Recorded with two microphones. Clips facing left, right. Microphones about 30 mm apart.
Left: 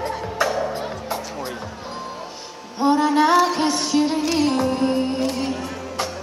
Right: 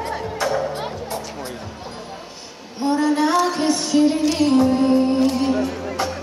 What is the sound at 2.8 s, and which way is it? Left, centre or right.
Music, centre.